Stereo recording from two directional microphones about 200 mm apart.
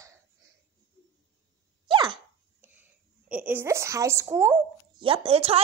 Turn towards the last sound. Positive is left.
turn(degrees=-30)  # may be behind; listen again after turning